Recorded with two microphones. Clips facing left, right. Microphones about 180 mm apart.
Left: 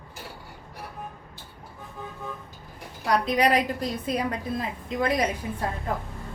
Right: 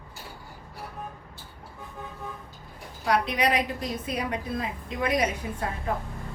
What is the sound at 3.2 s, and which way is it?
A woman's voice, 35° left (ahead or behind).